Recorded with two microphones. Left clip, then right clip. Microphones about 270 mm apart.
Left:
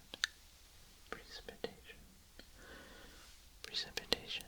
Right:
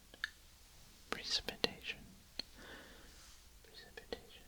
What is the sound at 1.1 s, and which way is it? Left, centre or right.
Whispering, centre.